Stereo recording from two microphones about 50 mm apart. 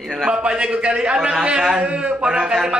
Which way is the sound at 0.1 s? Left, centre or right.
Centre.